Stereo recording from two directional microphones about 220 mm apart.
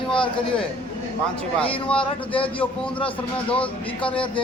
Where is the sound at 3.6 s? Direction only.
25° left (ahead or behind).